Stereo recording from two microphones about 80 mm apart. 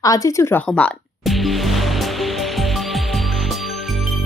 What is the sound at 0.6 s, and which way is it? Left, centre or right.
Speech, centre.